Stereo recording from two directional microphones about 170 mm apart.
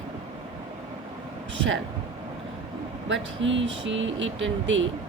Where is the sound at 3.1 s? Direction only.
90° right.